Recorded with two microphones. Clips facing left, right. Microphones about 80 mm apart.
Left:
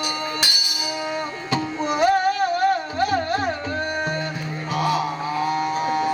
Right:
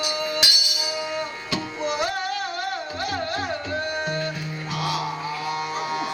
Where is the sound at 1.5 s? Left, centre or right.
Left.